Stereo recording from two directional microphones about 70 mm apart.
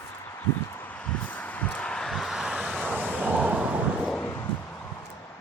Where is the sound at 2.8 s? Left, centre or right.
Centre.